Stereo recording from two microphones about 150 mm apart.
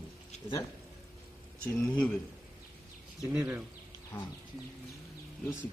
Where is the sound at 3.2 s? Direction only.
10° right (ahead or behind).